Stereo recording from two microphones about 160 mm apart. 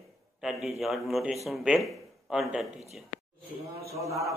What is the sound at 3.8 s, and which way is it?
Speech, 20° right (ahead or behind).